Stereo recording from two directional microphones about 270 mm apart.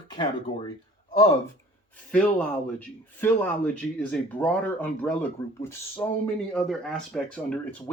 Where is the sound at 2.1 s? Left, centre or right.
Centre.